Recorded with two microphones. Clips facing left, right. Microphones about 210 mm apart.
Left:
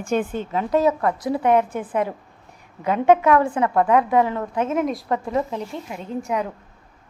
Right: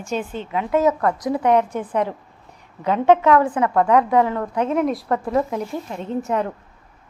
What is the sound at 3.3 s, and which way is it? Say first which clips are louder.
A woman's voice: right 1 dB; 25° left (ahead or behind).